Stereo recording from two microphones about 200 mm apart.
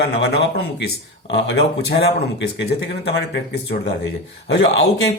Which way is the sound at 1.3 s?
60° left (ahead or behind).